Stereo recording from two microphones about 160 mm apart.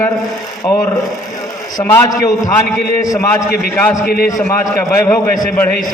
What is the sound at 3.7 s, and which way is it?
A man's voice, 15° left (ahead or behind).